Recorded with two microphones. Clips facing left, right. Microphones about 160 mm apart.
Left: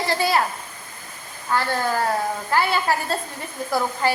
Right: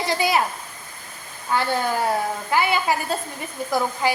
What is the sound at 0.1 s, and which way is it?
Speech, 15° right (ahead or behind).